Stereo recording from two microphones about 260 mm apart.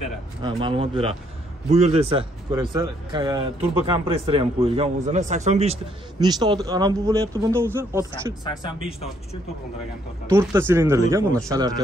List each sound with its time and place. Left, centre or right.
0.4 s speech: centre
8.5 s speech: centre
10.2 s a man's voice: centre